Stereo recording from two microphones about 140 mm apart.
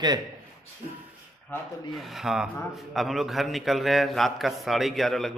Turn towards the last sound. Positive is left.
turn(degrees=0)  # may be behind; listen again after turning